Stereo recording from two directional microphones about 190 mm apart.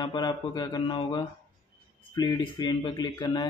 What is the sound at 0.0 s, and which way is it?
A man's voice, 25° left (ahead or behind).